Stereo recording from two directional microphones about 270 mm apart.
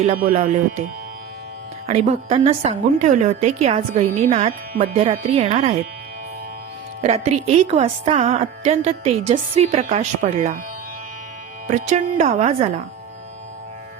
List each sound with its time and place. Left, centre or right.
0.0 s a woman's voice: right
1.9 s a woman's voice: right
7.0 s a woman's voice: right
11.7 s a woman's voice: right